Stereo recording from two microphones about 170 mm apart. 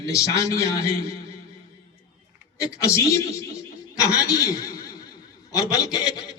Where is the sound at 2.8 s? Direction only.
15° left (ahead or behind).